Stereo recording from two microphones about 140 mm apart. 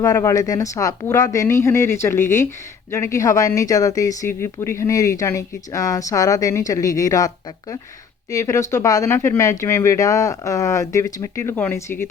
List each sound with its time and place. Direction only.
0.0 s speech: 20° left (ahead or behind)